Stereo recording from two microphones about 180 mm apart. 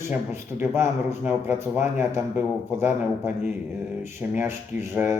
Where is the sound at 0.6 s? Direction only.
15° right (ahead or behind).